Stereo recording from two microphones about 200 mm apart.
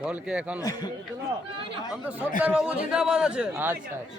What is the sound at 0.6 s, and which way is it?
Speech, 20° left (ahead or behind).